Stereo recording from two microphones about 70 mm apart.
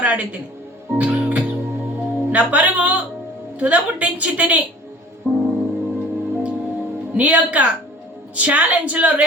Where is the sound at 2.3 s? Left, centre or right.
Right.